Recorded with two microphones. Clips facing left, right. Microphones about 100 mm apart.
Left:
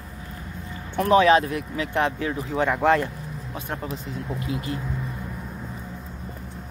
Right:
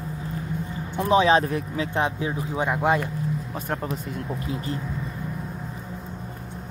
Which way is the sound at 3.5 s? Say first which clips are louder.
Right 2 dB; 40° right (ahead or behind).